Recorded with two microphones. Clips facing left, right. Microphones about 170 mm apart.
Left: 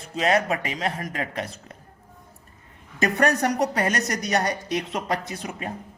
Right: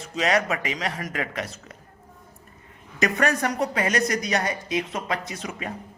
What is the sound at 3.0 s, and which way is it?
A man's voice, 40° left (ahead or behind).